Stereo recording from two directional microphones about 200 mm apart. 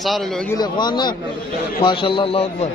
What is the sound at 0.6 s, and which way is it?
A man's voice, 20° left (ahead or behind).